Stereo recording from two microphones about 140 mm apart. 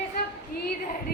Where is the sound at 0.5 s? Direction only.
90° left.